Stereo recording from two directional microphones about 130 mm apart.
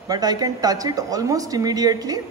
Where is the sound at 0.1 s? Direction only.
30° right (ahead or behind).